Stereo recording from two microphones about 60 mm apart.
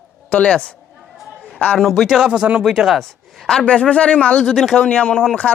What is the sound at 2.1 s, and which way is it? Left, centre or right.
Speech, centre.